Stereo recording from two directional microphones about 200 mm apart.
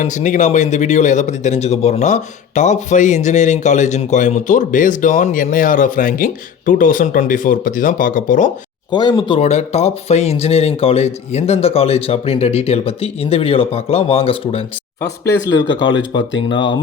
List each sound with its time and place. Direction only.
0.0 s speech: 35° left (ahead or behind)
9.0 s speech: 25° left (ahead or behind)
15.0 s speech: 15° left (ahead or behind)
16.6 s speech: 25° left (ahead or behind)